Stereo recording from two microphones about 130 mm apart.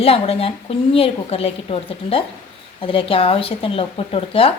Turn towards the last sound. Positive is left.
turn(degrees=45)  # may be behind; listen again after turning